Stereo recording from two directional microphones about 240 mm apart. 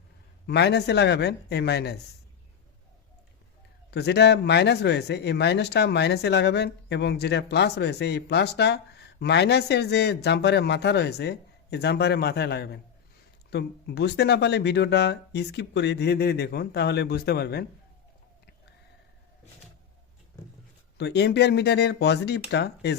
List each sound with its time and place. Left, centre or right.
0.4 s speech: left
3.9 s speech: left
21.0 s speech: left